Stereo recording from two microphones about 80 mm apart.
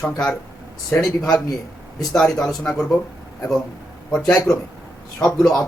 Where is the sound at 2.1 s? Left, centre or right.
Centre.